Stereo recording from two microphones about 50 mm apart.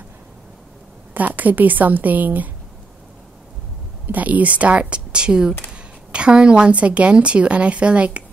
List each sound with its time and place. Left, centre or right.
1.1 s a woman's voice: right
4.1 s a woman's voice: right